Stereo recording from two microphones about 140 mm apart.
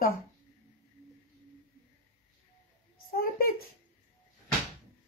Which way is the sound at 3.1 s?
90° left.